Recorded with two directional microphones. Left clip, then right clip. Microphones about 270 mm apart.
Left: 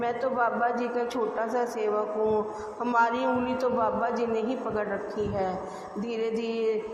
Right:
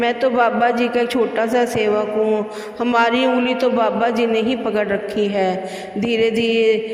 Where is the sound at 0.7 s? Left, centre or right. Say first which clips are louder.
Right 11 dB; right.